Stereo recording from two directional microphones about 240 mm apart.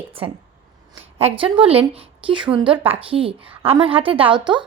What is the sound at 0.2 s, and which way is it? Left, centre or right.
A woman's voice, right.